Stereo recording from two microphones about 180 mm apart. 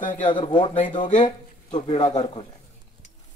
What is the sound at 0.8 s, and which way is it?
Speech, 45° left (ahead or behind).